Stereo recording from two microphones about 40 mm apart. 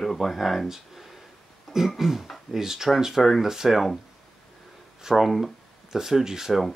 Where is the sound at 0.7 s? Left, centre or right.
Centre.